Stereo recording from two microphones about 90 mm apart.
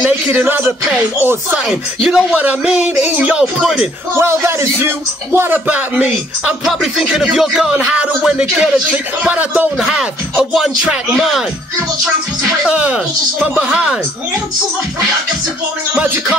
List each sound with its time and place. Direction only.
0.0 s speech: 20° right (ahead or behind)
1.7 s speech: 10° right (ahead or behind)
3.6 s speech: centre (ahead or behind)
4.1 s speech: 30° right (ahead or behind)
5.7 s speech: 15° right (ahead or behind)
6.6 s speech: 5° right (ahead or behind)
9.8 s speech: 5° right (ahead or behind)
12.6 s speech: 15° right (ahead or behind)